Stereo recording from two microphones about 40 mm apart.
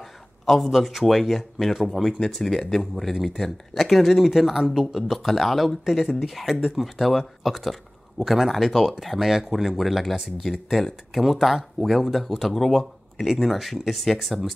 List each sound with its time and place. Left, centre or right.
0.0 s a man's voice: centre
2.2 s speech: centre
3.2 s speech: centre